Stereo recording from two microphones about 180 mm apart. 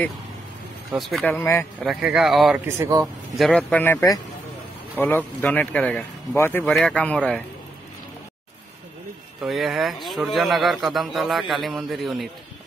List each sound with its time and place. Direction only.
0.9 s a man's voice: centre (ahead or behind)
1.4 s speech: 15° left (ahead or behind)
1.9 s a man's voice: centre (ahead or behind)
2.6 s speech: 15° right (ahead or behind)
3.3 s a man's voice: 5° left (ahead or behind)
9.4 s a man's voice: centre (ahead or behind)